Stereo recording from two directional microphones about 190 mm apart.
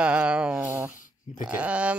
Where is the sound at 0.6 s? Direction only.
15° right (ahead or behind).